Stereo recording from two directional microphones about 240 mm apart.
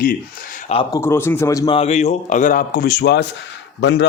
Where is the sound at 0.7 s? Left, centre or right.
Left.